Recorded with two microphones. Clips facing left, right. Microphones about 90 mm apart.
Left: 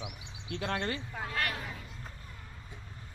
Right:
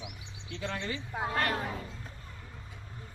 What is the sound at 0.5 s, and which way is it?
Speech, 60° left (ahead or behind).